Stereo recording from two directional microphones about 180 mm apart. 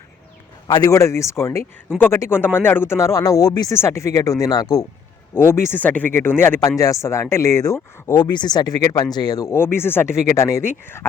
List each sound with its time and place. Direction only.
0.7 s speech: 20° left (ahead or behind)